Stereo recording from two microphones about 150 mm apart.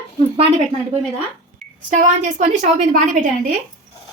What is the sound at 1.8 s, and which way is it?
A woman's voice, 55° right (ahead or behind).